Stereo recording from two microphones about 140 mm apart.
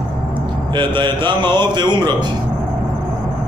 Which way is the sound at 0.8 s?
35° right (ahead or behind).